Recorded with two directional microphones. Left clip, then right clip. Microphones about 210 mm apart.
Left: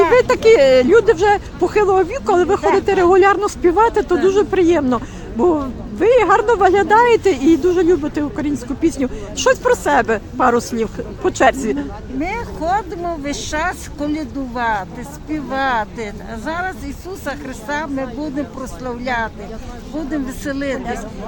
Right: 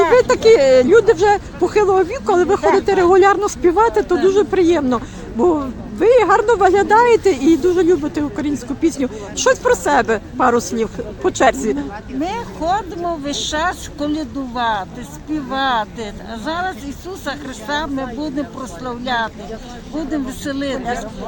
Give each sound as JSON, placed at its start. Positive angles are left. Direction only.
{"t": 0.1, "sound": "speech", "side_deg": 0}
{"t": 12.4, "sound": "speech", "side_deg": 20}
{"t": 20.4, "sound": "speech", "side_deg": 15}